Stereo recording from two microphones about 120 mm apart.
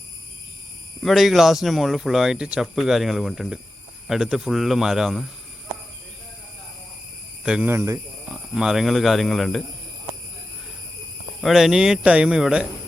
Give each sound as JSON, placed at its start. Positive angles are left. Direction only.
{"t": 1.0, "sound": "speech", "side_deg": 0}
{"t": 7.4, "sound": "speech", "side_deg": -5}
{"t": 7.7, "sound": "speech", "side_deg": -20}
{"t": 8.5, "sound": "speech", "side_deg": -5}
{"t": 11.3, "sound": "speech", "side_deg": 0}